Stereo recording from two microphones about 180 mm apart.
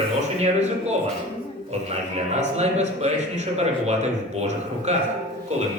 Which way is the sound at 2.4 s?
40° right (ahead or behind).